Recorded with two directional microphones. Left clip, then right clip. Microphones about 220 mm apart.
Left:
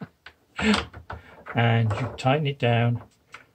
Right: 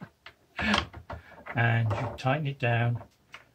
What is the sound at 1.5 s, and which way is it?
Speech, 35° left (ahead or behind).